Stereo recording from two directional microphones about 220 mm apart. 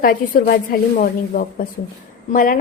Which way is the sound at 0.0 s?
40° left (ahead or behind).